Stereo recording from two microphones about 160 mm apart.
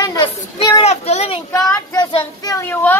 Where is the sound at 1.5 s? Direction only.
15° left (ahead or behind).